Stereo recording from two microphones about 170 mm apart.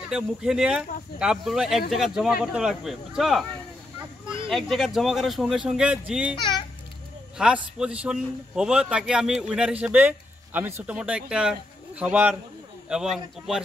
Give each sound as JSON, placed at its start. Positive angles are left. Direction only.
{"t": 0.1, "sound": "a man's voice", "side_deg": -5}
{"t": 4.5, "sound": "a man's voice", "side_deg": 0}
{"t": 6.3, "sound": "a child's voice", "side_deg": 25}
{"t": 7.3, "sound": "a man's voice", "side_deg": -5}